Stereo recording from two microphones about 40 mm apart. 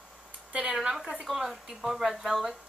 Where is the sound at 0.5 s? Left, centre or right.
Right.